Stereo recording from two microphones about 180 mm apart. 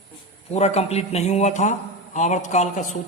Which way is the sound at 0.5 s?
35° left (ahead or behind).